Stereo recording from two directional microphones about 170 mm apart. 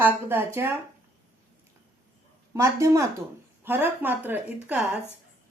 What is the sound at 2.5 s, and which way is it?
Speech, 15° right (ahead or behind).